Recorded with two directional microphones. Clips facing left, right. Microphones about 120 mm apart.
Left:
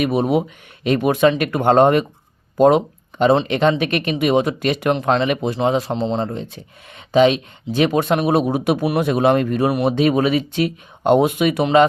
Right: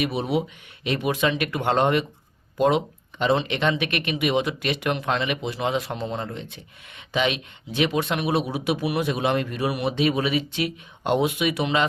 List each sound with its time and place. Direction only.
0.0 s speech: 50° left (ahead or behind)